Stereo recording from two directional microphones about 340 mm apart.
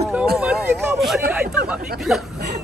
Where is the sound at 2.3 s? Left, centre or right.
Right.